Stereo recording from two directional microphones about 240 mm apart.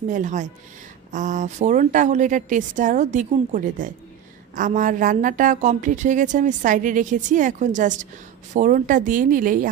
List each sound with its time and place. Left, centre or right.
0.1 s a woman's voice: right